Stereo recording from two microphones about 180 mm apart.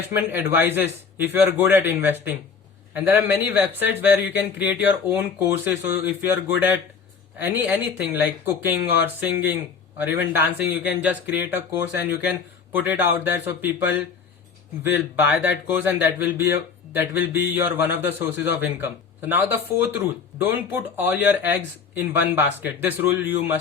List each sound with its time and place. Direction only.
0.1 s speech: 10° right (ahead or behind)
15.1 s speech: 10° right (ahead or behind)